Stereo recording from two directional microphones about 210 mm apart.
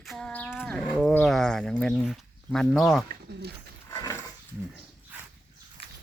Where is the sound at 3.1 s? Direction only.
50° right (ahead or behind).